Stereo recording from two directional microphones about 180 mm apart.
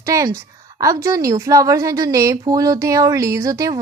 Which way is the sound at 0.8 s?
20° right (ahead or behind).